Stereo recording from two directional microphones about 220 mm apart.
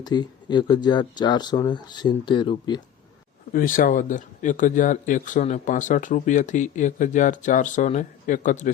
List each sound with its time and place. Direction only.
0.0 s speech: 20° left (ahead or behind)
3.5 s speech: 40° left (ahead or behind)